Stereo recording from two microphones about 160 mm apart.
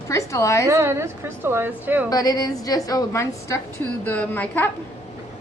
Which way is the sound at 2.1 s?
25° left (ahead or behind).